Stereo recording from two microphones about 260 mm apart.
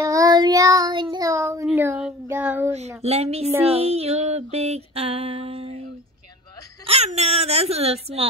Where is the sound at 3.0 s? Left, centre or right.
Right.